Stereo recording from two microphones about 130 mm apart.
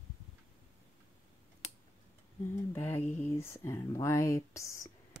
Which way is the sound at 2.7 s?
15° left (ahead or behind).